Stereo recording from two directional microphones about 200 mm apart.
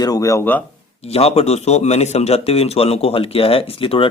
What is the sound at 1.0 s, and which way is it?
A man's voice, 30° left (ahead or behind).